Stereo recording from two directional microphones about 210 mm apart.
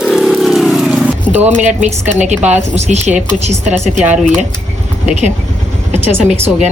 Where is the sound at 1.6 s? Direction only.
35° right (ahead or behind).